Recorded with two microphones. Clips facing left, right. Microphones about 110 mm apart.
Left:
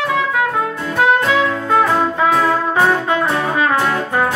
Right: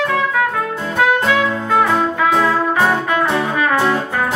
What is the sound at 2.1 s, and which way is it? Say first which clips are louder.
Music: even; 30° left (ahead or behind).